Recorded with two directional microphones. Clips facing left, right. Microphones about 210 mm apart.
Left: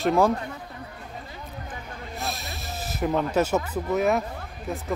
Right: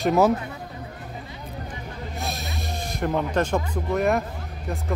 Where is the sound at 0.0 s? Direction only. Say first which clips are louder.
Right 2 dB; 5° right (ahead or behind).